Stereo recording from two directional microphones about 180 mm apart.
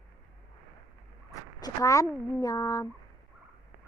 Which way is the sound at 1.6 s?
20° left (ahead or behind).